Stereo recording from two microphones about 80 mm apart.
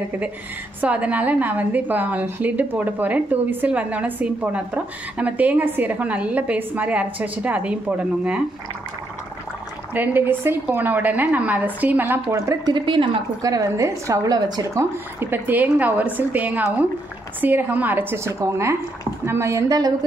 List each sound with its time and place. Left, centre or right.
0.7 s a woman's voice: centre
9.9 s a woman's voice: right
12.6 s a woman's voice: right
13.4 s a woman's voice: right
14.7 s a woman's voice: right